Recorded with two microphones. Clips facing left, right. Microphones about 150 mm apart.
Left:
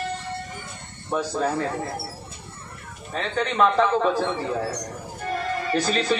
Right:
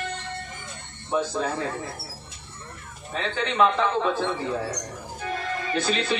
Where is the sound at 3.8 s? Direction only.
40° left (ahead or behind).